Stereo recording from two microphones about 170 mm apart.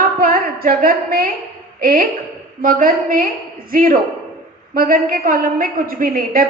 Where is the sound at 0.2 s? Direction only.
60° right (ahead or behind).